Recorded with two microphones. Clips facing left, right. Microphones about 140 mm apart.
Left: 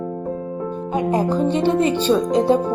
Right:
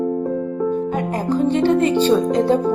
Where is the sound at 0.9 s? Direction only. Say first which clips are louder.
Left 1 dB; 20° left (ahead or behind).